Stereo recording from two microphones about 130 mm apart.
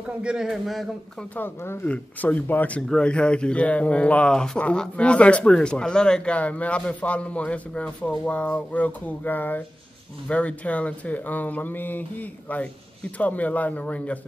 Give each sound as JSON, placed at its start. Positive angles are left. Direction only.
{"t": 0.2, "sound": "a man's voice", "side_deg": -5}
{"t": 1.3, "sound": "speech", "side_deg": 15}